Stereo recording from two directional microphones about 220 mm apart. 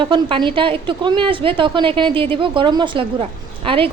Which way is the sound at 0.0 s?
20° right (ahead or behind).